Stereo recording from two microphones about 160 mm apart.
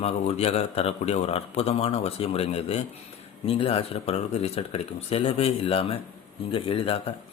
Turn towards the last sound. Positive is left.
turn(degrees=35)  # may be behind; listen again after turning